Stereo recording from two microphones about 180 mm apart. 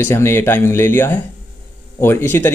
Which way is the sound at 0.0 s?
15° left (ahead or behind).